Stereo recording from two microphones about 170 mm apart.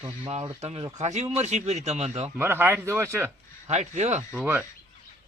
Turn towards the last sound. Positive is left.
turn(degrees=-10)  # may be behind; listen again after turning